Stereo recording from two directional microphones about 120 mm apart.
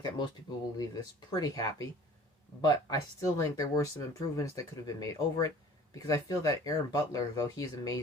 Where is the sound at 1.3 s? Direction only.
30° left (ahead or behind).